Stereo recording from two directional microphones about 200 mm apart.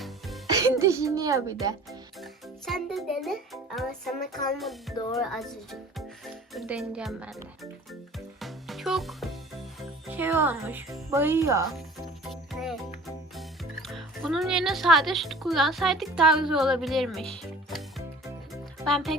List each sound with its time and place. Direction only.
0.5 s a child's voice: 15° right (ahead or behind)
1.9 s music: centre (ahead or behind)
5.1 s speech: centre (ahead or behind)
8.4 s music: centre (ahead or behind)
10.1 s speech: 10° right (ahead or behind)
12.3 s music: centre (ahead or behind)
13.8 s speech: centre (ahead or behind)